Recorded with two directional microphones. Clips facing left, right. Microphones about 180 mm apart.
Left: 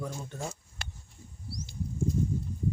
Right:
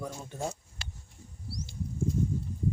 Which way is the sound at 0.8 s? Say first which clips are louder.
Left 4 dB; 50° left (ahead or behind).